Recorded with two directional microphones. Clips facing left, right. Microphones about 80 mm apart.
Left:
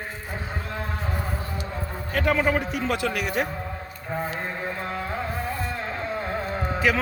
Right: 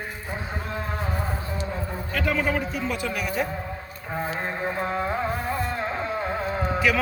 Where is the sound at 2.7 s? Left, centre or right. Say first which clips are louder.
Left 2 dB; left.